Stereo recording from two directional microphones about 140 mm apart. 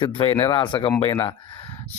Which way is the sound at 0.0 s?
40° left (ahead or behind).